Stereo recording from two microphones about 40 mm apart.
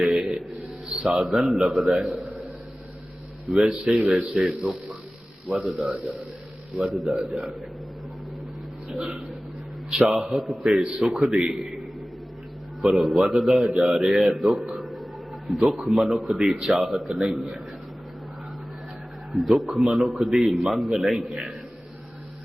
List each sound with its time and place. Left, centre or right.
0.0 s music: centre
0.9 s a man's voice: centre
3.5 s a man's voice: centre
4.1 s a man's voice: centre
10.0 s a man's voice: centre
12.8 s a man's voice: centre
14.8 s music: centre
15.4 s a man's voice: centre
19.3 s a man's voice: centre
21.2 s a man's voice: centre